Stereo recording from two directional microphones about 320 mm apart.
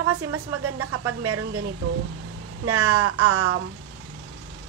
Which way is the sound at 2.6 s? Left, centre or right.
Right.